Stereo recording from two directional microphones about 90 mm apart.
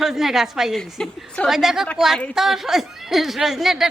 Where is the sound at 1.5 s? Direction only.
5° right (ahead or behind).